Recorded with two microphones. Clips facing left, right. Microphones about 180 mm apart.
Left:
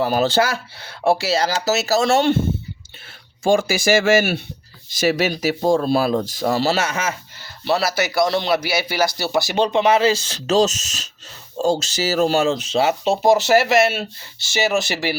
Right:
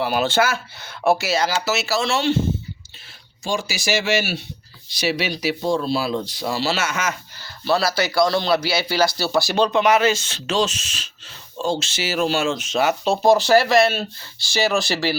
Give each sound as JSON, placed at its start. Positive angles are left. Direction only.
{"t": 0.0, "sound": "speech", "side_deg": 40}
{"t": 3.4, "sound": "a man's voice", "side_deg": 55}